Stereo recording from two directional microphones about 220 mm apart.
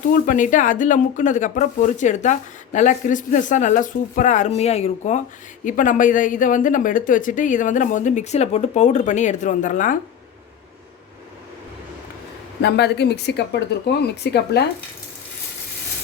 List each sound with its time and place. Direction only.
0.1 s speech: 35° left (ahead or behind)
12.6 s speech: 50° left (ahead or behind)